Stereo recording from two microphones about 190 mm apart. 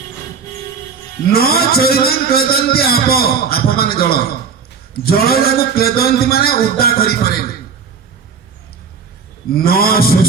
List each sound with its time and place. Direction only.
1.3 s a man's voice: 55° left (ahead or behind)
9.5 s a man's voice: 50° left (ahead or behind)